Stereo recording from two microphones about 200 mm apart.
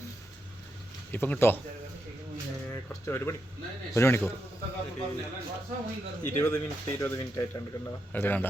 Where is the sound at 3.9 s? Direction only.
10° left (ahead or behind).